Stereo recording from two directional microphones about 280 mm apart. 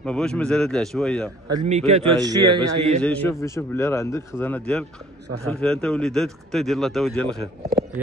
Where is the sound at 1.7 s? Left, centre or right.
Centre.